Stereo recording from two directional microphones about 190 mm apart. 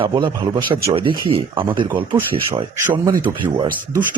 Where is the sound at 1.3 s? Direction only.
25° right (ahead or behind).